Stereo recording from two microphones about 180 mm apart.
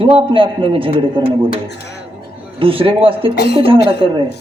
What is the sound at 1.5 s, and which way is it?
Speech, 70° left (ahead or behind).